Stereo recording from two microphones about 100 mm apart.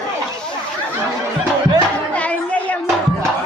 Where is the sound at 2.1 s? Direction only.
15° left (ahead or behind).